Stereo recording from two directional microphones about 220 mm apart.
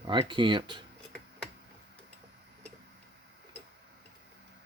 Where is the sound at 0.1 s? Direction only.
20° right (ahead or behind).